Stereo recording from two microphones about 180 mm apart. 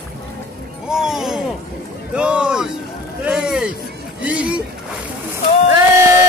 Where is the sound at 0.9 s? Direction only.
5° right (ahead or behind).